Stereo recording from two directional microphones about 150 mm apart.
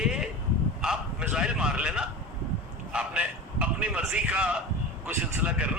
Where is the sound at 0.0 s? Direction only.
5° right (ahead or behind).